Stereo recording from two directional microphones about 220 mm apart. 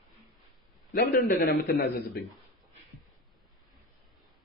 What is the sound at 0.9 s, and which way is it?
A man's voice, 40° left (ahead or behind).